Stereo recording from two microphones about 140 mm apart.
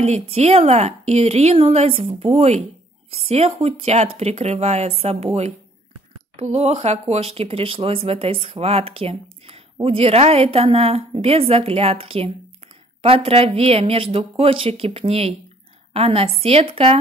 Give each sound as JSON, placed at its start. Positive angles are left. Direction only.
{"t": 0.0, "sound": "speech", "side_deg": -50}